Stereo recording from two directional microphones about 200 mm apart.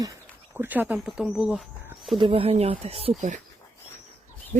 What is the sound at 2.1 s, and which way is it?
Speech, 25° right (ahead or behind).